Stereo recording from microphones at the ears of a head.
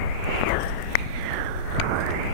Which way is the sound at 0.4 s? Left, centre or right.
Left.